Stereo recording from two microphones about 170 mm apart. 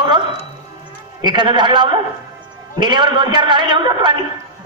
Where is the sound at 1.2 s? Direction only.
25° right (ahead or behind).